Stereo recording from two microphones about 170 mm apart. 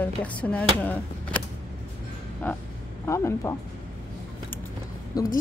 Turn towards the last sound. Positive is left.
turn(degrees=20)  # may be behind; listen again after turning